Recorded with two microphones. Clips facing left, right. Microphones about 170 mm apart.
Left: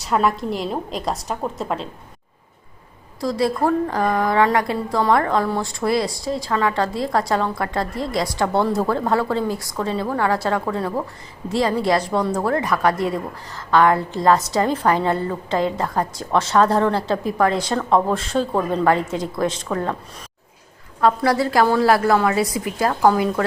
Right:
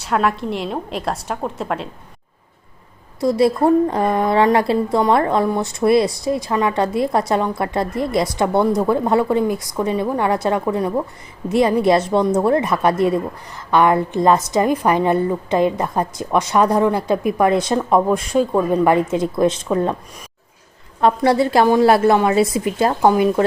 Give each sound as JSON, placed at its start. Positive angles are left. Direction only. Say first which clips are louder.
{"t": 0.0, "sound": "a woman's voice", "louder": "right 1 dB", "side_deg": 0}
{"t": 3.2, "sound": "a woman's voice", "louder": "right 5 dB", "side_deg": -25}
{"t": 21.0, "sound": "a woman's voice", "louder": "right 3 dB", "side_deg": -20}